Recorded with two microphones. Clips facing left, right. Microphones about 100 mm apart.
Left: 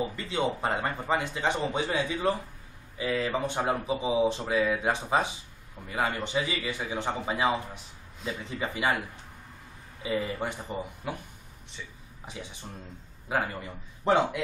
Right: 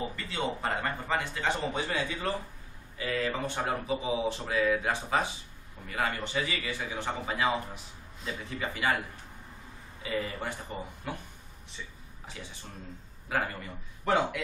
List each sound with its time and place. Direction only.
0.1 s speech: 20° left (ahead or behind)
10.0 s speech: 20° left (ahead or behind)
12.3 s speech: 20° left (ahead or behind)